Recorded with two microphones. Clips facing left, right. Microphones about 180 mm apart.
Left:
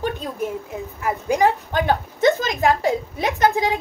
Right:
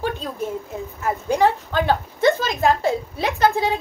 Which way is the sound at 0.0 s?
15° left (ahead or behind).